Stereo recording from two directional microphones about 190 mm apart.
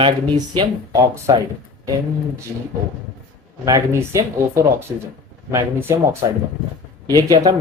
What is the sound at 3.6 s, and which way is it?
Speech, 15° right (ahead or behind).